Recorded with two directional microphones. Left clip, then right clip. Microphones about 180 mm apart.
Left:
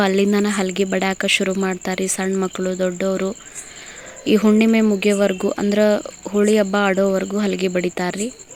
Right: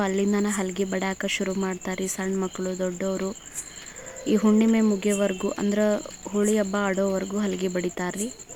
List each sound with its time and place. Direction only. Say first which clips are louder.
0.0 s speech: left 8 dB; 25° left (ahead or behind)